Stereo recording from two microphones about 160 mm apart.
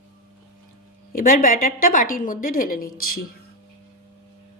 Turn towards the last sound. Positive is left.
turn(degrees=65)  # may be behind; listen again after turning